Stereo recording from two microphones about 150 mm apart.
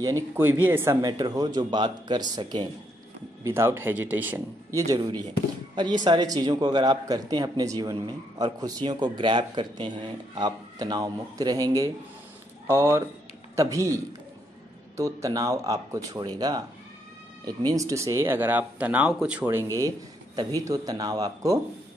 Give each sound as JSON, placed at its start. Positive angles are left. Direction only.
{"t": 0.0, "sound": "speech", "side_deg": -20}
{"t": 3.4, "sound": "speech", "side_deg": -15}
{"t": 15.0, "sound": "speech", "side_deg": -20}
{"t": 19.4, "sound": "speech", "side_deg": -20}